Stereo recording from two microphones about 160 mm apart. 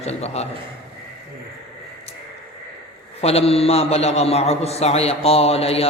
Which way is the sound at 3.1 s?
40° left (ahead or behind).